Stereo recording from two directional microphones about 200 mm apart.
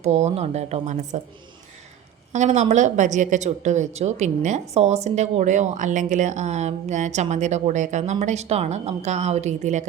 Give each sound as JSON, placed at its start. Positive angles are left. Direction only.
{"t": 0.0, "sound": "speech", "side_deg": -35}
{"t": 2.3, "sound": "speech", "side_deg": -35}